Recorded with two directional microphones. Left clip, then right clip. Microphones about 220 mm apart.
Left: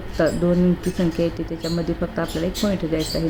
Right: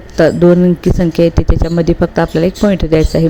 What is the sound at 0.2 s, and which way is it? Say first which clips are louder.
Speech: right 11 dB; 35° right (ahead or behind).